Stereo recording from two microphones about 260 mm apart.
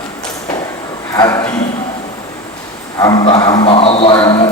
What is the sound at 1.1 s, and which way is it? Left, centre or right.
Speech, centre.